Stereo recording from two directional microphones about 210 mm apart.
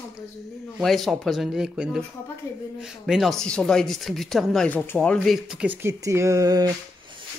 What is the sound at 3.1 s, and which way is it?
Speech, centre (ahead or behind).